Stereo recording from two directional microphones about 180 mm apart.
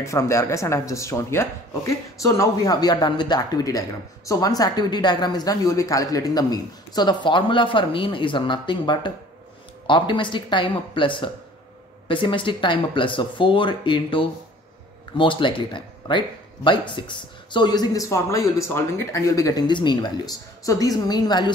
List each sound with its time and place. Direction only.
0.0 s speech: 15° left (ahead or behind)